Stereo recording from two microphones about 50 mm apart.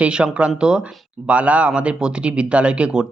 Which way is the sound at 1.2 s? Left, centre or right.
Right.